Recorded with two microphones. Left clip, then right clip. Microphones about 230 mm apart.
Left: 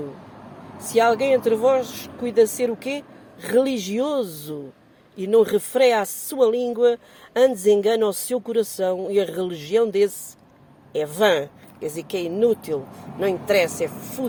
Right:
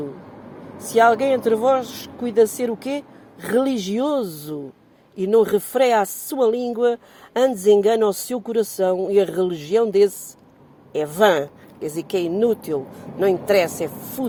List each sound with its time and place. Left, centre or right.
0.8 s speech: centre